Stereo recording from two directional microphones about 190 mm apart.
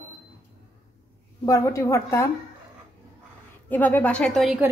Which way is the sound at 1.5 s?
15° left (ahead or behind).